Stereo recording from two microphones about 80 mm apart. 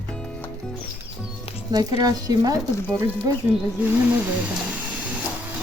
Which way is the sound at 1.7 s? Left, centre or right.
Right.